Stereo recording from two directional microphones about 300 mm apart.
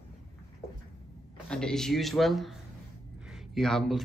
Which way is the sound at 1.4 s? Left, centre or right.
Centre.